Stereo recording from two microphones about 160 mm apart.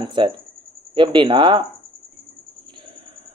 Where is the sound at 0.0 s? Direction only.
30° right (ahead or behind).